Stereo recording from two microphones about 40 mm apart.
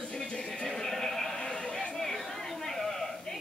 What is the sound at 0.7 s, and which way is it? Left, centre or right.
Horse, centre.